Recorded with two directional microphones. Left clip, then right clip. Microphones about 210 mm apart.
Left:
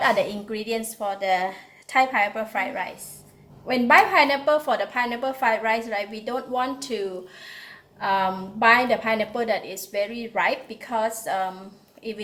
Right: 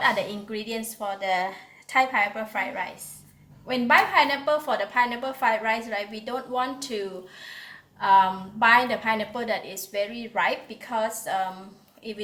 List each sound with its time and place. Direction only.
0.0 s a woman's voice: 10° right (ahead or behind)
7.4 s a sound: 15° right (ahead or behind)
8.0 s a woman's voice: 90° right
8.6 s a woman's voice: 20° right (ahead or behind)